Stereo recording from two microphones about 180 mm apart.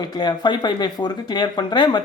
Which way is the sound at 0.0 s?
25° left (ahead or behind).